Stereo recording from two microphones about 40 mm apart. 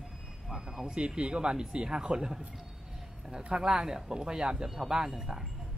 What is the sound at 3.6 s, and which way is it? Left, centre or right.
Speech, centre.